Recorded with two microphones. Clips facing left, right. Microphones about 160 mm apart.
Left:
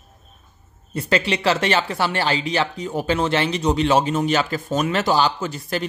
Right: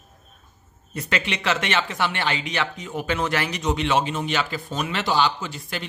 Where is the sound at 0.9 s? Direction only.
30° left (ahead or behind).